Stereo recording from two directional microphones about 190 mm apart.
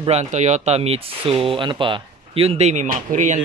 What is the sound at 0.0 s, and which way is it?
Speech, 35° right (ahead or behind).